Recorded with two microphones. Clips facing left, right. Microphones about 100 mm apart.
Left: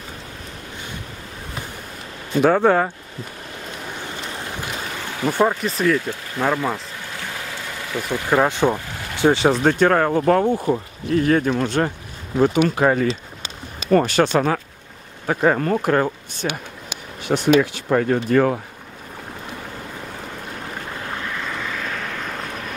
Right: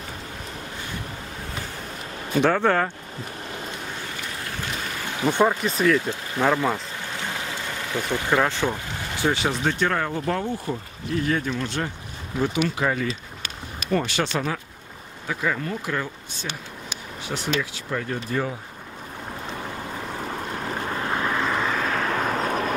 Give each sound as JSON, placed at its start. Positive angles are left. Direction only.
{"t": 2.4, "sound": "speech", "side_deg": 15}
{"t": 5.2, "sound": "speech", "side_deg": 5}
{"t": 7.9, "sound": "speech", "side_deg": 0}
{"t": 9.5, "sound": "speech", "side_deg": 45}
{"t": 21.2, "sound": "vehicle", "side_deg": -50}